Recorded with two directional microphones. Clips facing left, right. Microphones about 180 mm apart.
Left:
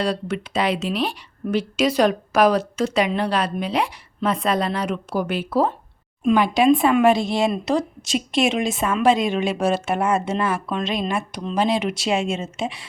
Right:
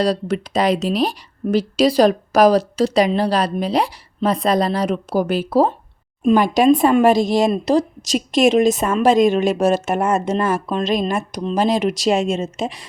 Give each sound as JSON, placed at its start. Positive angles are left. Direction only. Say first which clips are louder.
{"t": 0.0, "sound": "speech", "louder": "right 5 dB", "side_deg": -35}